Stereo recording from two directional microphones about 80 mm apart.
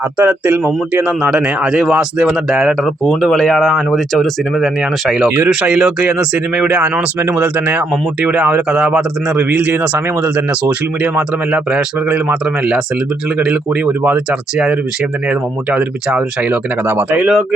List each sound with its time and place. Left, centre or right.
0.2 s speech: right
2.8 s speech: centre
16.9 s speech: right
17.2 s speech: centre